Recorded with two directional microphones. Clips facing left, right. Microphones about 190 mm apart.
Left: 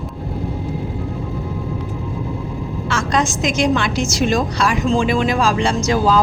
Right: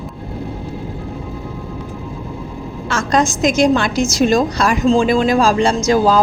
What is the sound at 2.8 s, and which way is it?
A woman's voice, 40° right (ahead or behind).